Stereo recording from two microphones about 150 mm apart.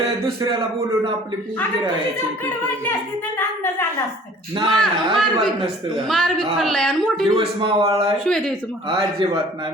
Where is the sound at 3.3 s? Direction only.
15° left (ahead or behind).